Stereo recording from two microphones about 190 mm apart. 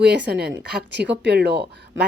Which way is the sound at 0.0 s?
60° right (ahead or behind).